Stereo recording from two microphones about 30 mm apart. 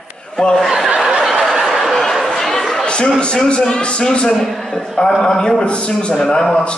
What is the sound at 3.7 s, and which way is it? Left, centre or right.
Speech, left.